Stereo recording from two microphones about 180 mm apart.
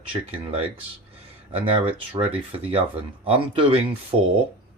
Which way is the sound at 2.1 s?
30° right (ahead or behind).